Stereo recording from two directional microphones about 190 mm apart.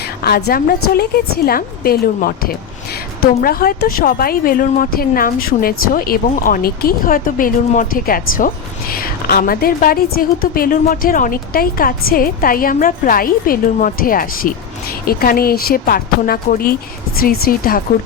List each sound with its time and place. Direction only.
0.2 s a woman's voice: 55° left (ahead or behind)